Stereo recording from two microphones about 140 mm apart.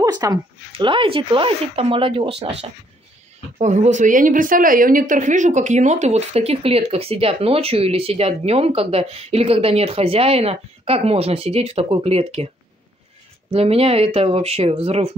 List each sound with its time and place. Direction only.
0.0 s speech: 30° right (ahead or behind)
3.5 s speech: 55° right (ahead or behind)
13.5 s speech: 45° right (ahead or behind)